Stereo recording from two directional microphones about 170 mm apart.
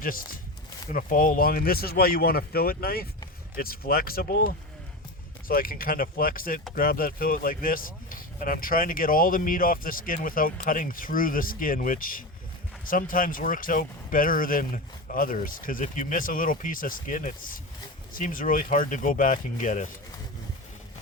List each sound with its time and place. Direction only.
0.0 s speech: 55° left (ahead or behind)